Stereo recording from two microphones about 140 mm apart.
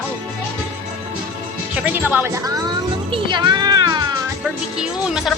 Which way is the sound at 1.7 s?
10° right (ahead or behind).